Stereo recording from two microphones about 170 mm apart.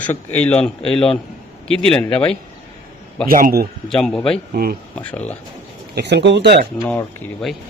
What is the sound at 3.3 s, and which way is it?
Speech, 55° right (ahead or behind).